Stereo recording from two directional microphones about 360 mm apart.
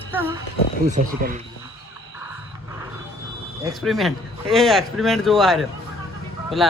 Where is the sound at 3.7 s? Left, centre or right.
Centre.